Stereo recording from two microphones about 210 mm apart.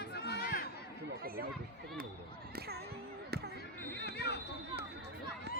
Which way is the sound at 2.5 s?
50° right (ahead or behind).